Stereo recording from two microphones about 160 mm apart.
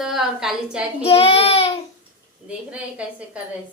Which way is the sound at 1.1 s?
35° left (ahead or behind).